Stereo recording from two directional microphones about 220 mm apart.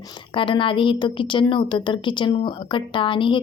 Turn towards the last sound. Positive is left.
turn(degrees=20)  # may be behind; listen again after turning